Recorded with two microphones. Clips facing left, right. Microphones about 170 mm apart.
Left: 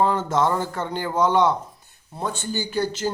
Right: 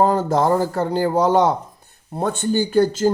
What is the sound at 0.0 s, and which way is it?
A man's voice, 40° right (ahead or behind).